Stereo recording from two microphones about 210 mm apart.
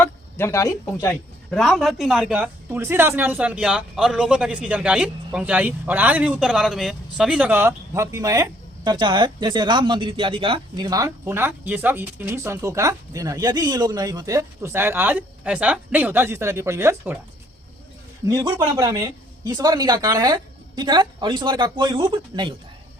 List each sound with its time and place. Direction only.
0.0 s a sound: 10° left (ahead or behind)
1.0 s speech: 5° left (ahead or behind); by 17.2 s 10° right (ahead or behind)
18.3 s speech: 15° right (ahead or behind)